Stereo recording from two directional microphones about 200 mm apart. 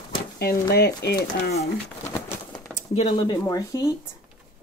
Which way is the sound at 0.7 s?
55° left (ahead or behind).